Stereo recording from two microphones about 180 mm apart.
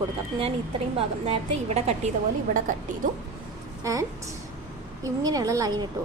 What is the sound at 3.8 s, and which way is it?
A woman's voice, 20° right (ahead or behind).